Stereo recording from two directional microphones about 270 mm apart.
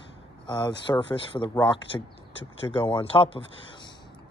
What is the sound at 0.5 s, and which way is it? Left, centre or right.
Speech, centre.